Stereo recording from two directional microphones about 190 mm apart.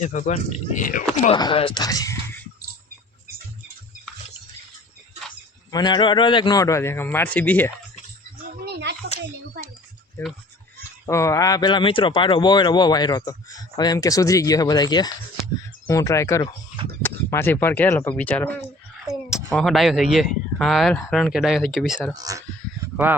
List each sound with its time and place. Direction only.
0.0 s speech: 40° left (ahead or behind)
1.3 s speech: 25° left (ahead or behind)
5.7 s a man's voice: 20° left (ahead or behind)
8.6 s a sound: 65° right (ahead or behind)
11.0 s a man's voice: 15° left (ahead or behind)
19.5 s speech: centre (ahead or behind)
22.1 s speech: 20° right (ahead or behind)